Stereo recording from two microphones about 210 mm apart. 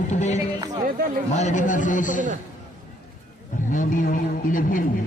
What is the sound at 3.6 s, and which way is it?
A man's voice, 40° left (ahead or behind).